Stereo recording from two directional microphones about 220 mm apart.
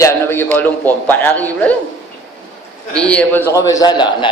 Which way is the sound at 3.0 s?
5° left (ahead or behind).